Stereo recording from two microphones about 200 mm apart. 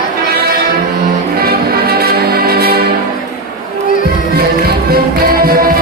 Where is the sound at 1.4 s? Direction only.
50° right (ahead or behind).